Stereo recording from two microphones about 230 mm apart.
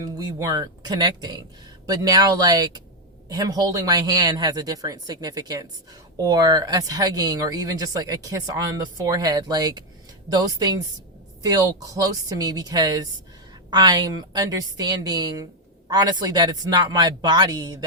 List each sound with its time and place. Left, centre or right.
0.0 s speech: centre